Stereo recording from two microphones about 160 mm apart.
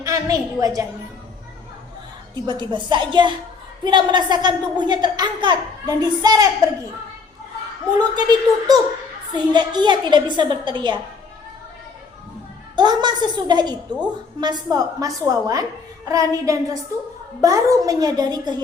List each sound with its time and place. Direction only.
0.0 s a woman's voice: 20° right (ahead or behind)
2.3 s speech: 30° right (ahead or behind)
7.9 s speech: 25° right (ahead or behind)
12.7 s speech: 25° right (ahead or behind)